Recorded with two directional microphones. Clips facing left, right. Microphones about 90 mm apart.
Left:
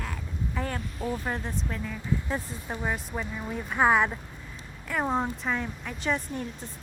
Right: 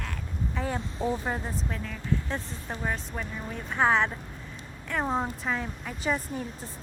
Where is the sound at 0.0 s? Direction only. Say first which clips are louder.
Even; centre (ahead or behind).